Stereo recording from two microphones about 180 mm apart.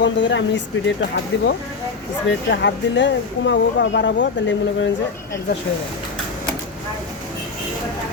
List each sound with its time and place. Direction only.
0.0 s speech: 90° left